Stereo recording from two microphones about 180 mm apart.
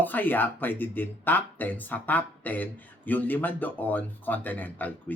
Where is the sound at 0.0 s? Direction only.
10° left (ahead or behind).